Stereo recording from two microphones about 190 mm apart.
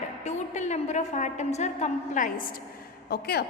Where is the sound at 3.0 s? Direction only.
55° left (ahead or behind).